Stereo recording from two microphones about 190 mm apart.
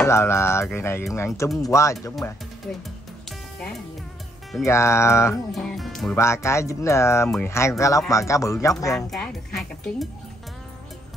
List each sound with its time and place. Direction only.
0.0 s speech: 15° left (ahead or behind)
3.3 s music: 5° left (ahead or behind)
4.6 s speech: 15° left (ahead or behind)
5.5 s speech: centre (ahead or behind)
6.1 s speech: 15° left (ahead or behind)
7.2 s speech: 5° left (ahead or behind)
7.5 s speech: 15° left (ahead or behind)
8.9 s speech: centre (ahead or behind)